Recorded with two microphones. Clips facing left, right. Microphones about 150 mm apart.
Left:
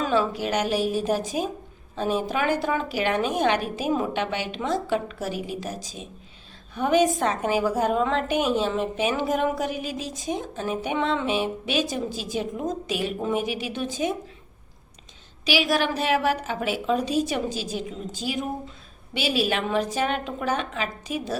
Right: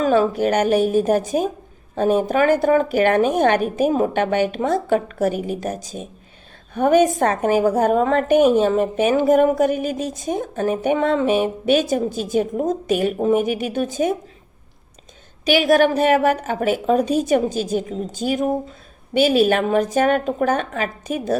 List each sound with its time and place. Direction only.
0.0 s a woman's voice: 55° right (ahead or behind)
15.4 s a woman's voice: 50° right (ahead or behind)